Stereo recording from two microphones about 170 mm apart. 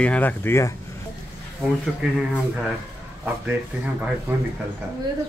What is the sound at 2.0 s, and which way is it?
Speech, 5° right (ahead or behind).